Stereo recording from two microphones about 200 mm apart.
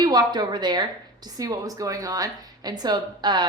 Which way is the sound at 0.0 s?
20° right (ahead or behind).